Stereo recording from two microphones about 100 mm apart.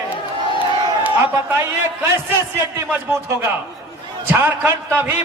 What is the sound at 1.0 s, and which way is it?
A man's voice, 15° right (ahead or behind).